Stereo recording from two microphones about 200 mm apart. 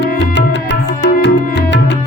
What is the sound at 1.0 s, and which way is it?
Music, 60° left (ahead or behind).